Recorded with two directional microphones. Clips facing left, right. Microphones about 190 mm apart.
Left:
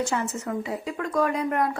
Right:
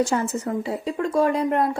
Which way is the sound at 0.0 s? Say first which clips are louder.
Right 5 dB; 35° right (ahead or behind).